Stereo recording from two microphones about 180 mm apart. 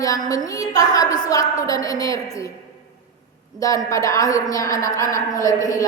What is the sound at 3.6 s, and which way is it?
A woman's voice, 20° left (ahead or behind).